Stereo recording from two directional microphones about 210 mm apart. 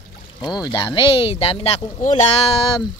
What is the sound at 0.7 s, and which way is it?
Speech, 20° left (ahead or behind).